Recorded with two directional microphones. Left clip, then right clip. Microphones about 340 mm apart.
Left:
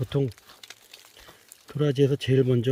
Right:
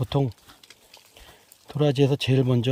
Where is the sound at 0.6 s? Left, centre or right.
Centre.